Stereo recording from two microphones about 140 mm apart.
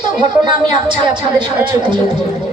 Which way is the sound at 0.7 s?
35° right (ahead or behind).